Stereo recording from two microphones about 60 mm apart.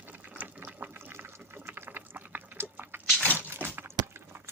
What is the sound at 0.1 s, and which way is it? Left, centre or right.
Sewing machine, right.